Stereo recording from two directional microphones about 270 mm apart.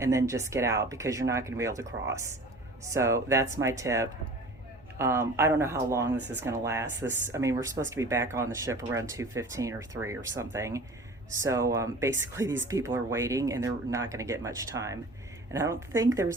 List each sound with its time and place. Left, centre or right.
0.0 s speech: centre